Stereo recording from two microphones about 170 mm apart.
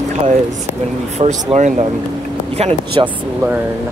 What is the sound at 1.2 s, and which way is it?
Speech, 45° right (ahead or behind).